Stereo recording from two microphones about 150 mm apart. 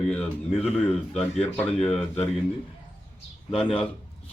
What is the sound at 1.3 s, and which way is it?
Speech, 50° left (ahead or behind).